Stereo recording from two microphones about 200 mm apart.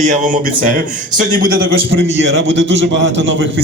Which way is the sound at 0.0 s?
40° right (ahead or behind).